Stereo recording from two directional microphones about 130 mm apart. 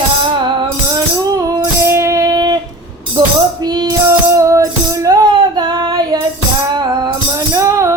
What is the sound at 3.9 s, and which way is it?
Music, 25° right (ahead or behind).